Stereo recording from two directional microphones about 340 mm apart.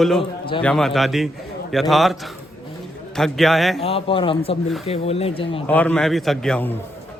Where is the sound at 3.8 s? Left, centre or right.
Centre.